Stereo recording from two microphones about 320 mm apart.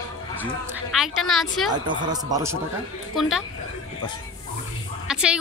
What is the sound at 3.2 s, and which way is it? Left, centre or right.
Speech, centre.